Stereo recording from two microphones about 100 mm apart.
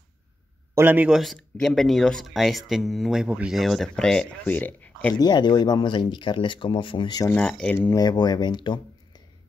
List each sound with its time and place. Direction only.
0.7 s speech: 20° right (ahead or behind)
1.1 s speech: centre (ahead or behind); by 5.1 s 15° left (ahead or behind)
5.2 s speech: 45° left (ahead or behind)
7.2 s speech: 10° left (ahead or behind)
7.9 s speech: 45° left (ahead or behind)